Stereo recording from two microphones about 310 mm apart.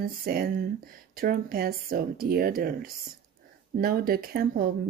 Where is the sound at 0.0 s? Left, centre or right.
Right.